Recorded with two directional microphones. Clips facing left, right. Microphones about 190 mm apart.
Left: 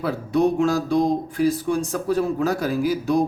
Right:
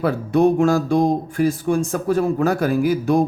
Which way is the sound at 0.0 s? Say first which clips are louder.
Right 4 dB; 55° right (ahead or behind).